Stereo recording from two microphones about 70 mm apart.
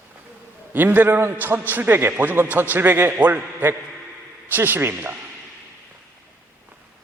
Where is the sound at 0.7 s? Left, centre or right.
Right.